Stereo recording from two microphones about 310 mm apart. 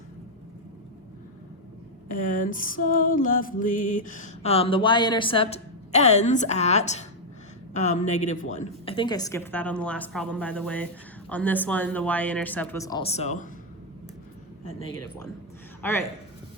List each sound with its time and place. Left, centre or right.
2.0 s music: left
7.8 s a woman's voice: left
15.8 s a man's voice: centre